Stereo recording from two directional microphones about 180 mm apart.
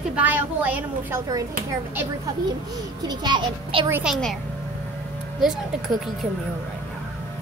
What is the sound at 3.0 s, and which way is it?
Speech, 25° right (ahead or behind).